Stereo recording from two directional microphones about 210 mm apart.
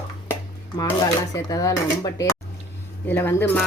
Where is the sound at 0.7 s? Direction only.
15° left (ahead or behind).